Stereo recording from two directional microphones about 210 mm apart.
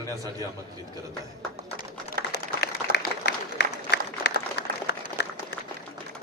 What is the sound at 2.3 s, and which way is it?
Applause, 50° left (ahead or behind).